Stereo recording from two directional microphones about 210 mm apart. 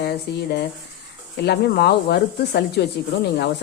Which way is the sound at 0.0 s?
50° left (ahead or behind).